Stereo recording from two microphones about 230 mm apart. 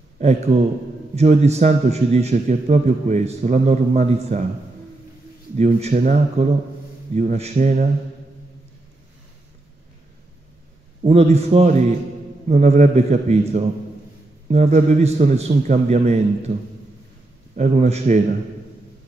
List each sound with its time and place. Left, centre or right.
0.2 s a man's voice: right
5.6 s a man's voice: right
11.1 s a man's voice: right
17.6 s a man's voice: right